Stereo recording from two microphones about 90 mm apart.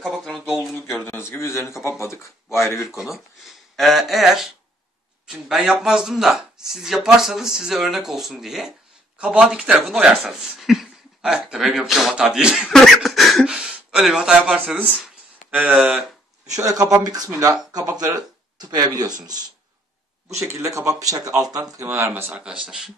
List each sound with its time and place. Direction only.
0.0 s a sound: centre (ahead or behind)
1.0 s speech: 25° left (ahead or behind)
3.4 s speech: centre (ahead or behind)
12.7 s a sound: centre (ahead or behind)
13.5 s speech: 5° right (ahead or behind)
16.5 s speech: 40° right (ahead or behind)
20.6 s speech: 40° right (ahead or behind)
21.7 s speech: 30° right (ahead or behind)
22.4 s speech: 10° right (ahead or behind)